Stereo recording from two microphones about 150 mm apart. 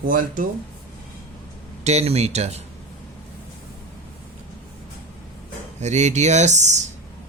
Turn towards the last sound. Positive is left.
turn(degrees=-50)  # may be behind; listen again after turning